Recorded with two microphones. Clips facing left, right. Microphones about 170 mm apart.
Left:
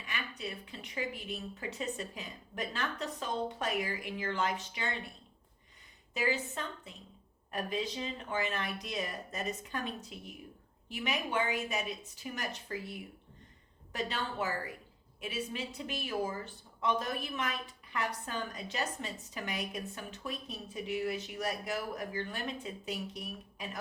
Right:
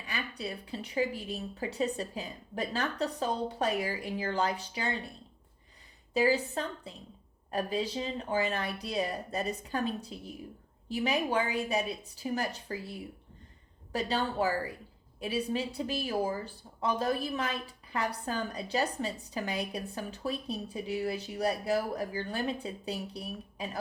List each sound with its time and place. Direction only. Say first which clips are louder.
0.0 s speech: right 3 dB; 35° right (ahead or behind)
6.1 s speech: right 7 dB; 35° right (ahead or behind)